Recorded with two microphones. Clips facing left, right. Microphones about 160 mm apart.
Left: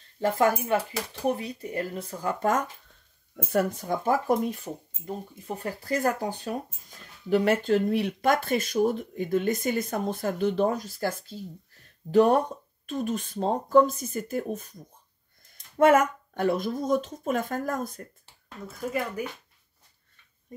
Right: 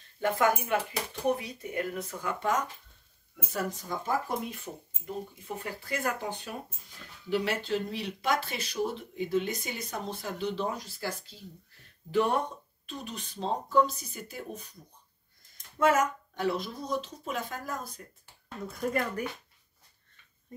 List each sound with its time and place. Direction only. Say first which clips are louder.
0.2 s speech: left 3 dB; 30° left (ahead or behind)
3.5 s speech: left 8 dB; 60° left (ahead or behind)
5.6 s speech: left 7 dB; 40° left (ahead or behind)
15.8 s speech: left 6 dB; 55° left (ahead or behind)
18.7 s speech: even; 5° left (ahead or behind)